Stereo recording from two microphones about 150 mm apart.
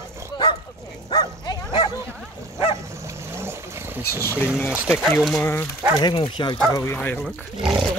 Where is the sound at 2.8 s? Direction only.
20° right (ahead or behind).